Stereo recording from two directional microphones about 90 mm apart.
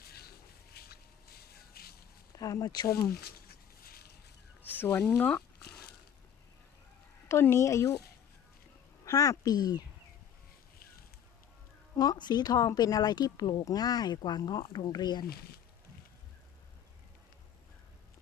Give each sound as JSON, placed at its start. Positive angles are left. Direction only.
{"t": 2.3, "sound": "speech", "side_deg": 40}
{"t": 4.6, "sound": "speech", "side_deg": 20}
{"t": 7.3, "sound": "a woman's voice", "side_deg": 30}
{"t": 9.0, "sound": "speech", "side_deg": 35}
{"t": 11.9, "sound": "speech", "side_deg": 50}